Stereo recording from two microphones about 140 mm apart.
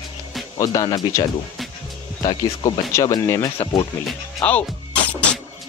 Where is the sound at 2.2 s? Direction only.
25° left (ahead or behind).